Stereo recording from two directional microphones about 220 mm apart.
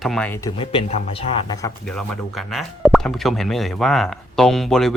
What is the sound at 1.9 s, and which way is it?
Speech, centre (ahead or behind).